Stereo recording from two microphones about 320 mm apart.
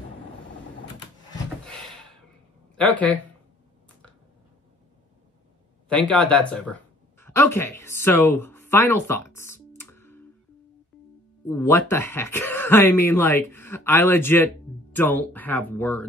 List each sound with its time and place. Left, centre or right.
1.7 s a sound: centre
2.8 s speech: centre
5.9 s speech: centre
9.8 s music: centre
11.4 s speech: centre